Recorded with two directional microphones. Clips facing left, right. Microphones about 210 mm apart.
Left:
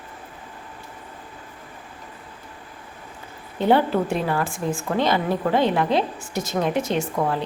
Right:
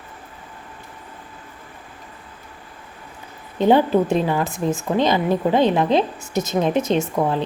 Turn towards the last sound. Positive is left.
turn(degrees=-20)  # may be behind; listen again after turning